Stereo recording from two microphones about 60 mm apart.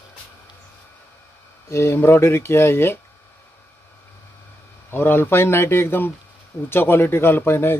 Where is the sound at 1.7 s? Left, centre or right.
Left.